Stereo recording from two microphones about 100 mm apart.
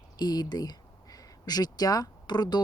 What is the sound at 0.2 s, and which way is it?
Speech, 45° left (ahead or behind).